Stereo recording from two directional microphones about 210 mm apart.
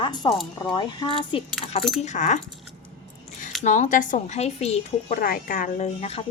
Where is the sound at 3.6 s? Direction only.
35° left (ahead or behind).